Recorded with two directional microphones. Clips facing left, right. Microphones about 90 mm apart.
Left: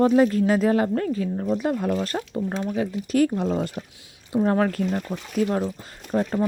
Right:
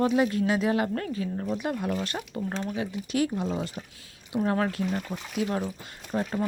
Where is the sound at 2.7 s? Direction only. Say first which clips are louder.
Left 8 dB; 40° left (ahead or behind).